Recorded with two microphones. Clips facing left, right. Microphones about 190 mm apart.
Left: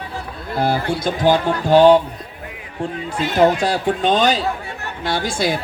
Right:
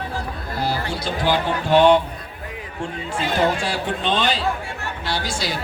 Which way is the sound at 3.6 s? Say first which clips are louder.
Left 6 dB; 40° left (ahead or behind).